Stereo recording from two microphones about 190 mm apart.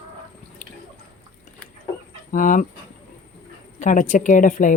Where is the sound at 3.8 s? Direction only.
40° left (ahead or behind).